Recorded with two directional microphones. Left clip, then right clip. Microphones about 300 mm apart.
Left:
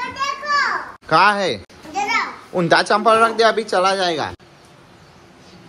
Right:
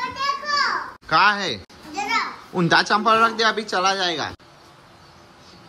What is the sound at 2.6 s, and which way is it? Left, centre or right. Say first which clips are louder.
Speech: left 3 dB; centre.